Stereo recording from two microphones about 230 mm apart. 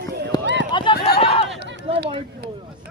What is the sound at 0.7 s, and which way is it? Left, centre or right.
Speech, left.